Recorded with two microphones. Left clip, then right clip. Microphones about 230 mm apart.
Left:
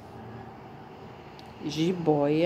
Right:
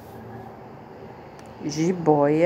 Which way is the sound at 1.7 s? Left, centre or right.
Centre.